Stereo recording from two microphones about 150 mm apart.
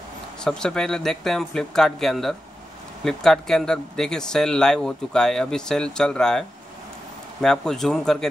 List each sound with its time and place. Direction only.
0.4 s speech: 5° left (ahead or behind)
7.4 s speech: 5° left (ahead or behind)